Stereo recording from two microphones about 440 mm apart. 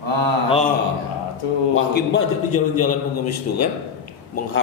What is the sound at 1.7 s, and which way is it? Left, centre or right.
A man's voice, left.